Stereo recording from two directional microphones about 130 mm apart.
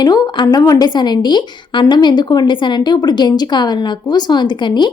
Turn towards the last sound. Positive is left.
turn(degrees=35)  # may be behind; listen again after turning